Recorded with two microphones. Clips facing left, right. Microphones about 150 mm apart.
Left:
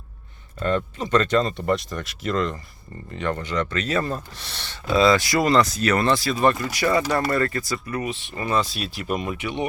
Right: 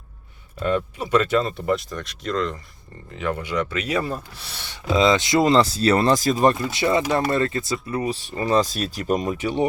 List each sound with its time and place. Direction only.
0.6 s speech: 10° right (ahead or behind); by 6.3 s 40° right (ahead or behind)
6.3 s speech: 30° right (ahead or behind)